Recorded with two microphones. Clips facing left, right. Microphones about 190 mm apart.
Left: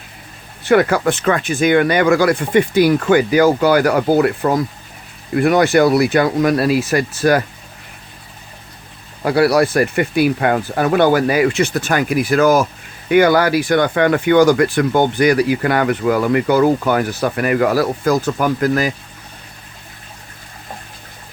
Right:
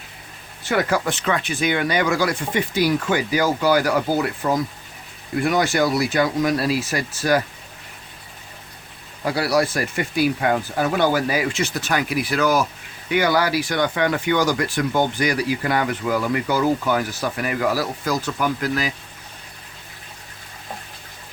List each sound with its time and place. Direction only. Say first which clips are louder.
0.6 s speech: left 7 dB; 60° left (ahead or behind)
9.2 s speech: left 7 dB; 60° left (ahead or behind)